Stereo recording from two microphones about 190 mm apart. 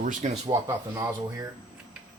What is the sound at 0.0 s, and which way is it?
Speech, 45° right (ahead or behind).